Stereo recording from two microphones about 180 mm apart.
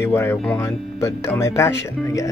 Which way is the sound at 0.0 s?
15° left (ahead or behind).